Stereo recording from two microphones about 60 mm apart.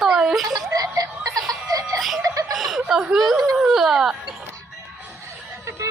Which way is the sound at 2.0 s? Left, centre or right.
Centre.